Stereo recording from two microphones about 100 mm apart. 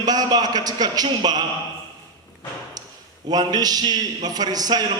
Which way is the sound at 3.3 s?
45° right (ahead or behind).